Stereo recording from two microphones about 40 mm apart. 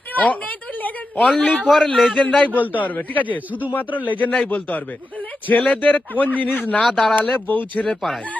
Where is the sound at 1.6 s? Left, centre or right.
Centre.